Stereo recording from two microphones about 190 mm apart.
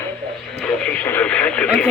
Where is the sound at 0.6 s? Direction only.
5° left (ahead or behind).